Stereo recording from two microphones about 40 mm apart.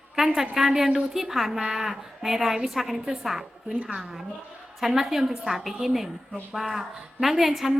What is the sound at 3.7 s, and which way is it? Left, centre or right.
Speech, right.